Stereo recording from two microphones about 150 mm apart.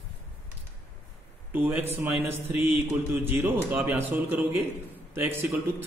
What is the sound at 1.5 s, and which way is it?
A man's voice, 10° right (ahead or behind).